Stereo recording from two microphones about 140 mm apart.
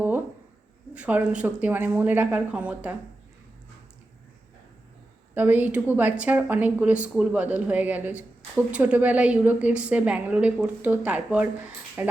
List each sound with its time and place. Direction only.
0.9 s a woman's voice: 10° right (ahead or behind)
5.3 s a woman's voice: 15° right (ahead or behind)